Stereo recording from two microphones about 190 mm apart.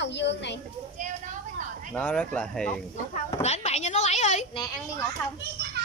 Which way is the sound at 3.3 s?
35° left (ahead or behind).